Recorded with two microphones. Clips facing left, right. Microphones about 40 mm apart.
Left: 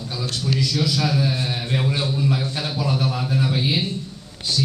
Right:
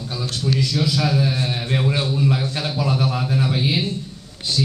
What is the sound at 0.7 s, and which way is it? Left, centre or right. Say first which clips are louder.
A man's voice: right 1 dB; centre.